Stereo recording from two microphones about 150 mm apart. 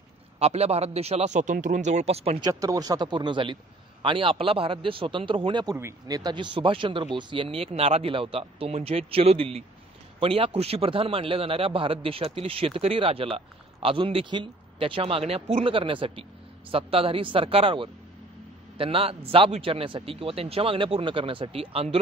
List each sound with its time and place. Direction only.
0.4 s a man's voice: 45° right (ahead or behind)
2.4 s a man's voice: 25° right (ahead or behind); by 21.9 s 40° right (ahead or behind)